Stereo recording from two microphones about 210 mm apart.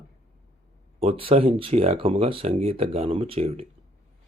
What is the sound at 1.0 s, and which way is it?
Speech, 25° right (ahead or behind).